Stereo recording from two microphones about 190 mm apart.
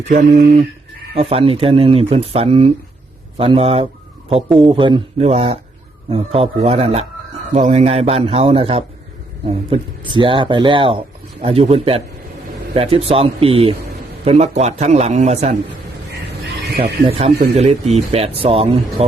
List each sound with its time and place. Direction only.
0.1 s speech: 50° right (ahead or behind)
1.1 s speech: 30° right (ahead or behind)
16.7 s speech: 30° right (ahead or behind)